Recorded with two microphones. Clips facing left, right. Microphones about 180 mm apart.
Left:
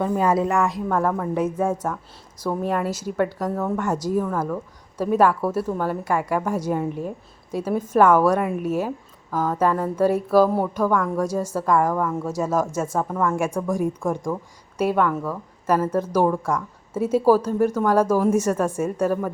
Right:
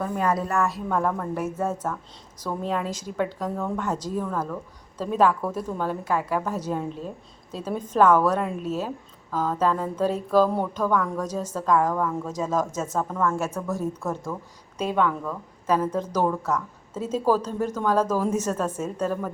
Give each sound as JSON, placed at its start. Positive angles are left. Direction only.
{"t": 0.0, "sound": "speech", "side_deg": 25}
{"t": 0.9, "sound": "a woman's voice", "side_deg": 5}